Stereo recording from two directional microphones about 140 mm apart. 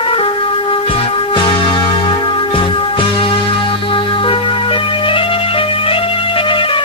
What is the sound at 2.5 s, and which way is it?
Music, 40° left (ahead or behind).